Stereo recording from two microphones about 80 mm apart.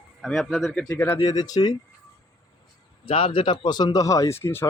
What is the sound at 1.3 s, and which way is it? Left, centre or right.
Speech, left.